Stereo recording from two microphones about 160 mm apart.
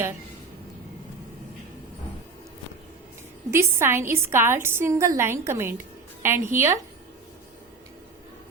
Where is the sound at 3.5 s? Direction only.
15° right (ahead or behind).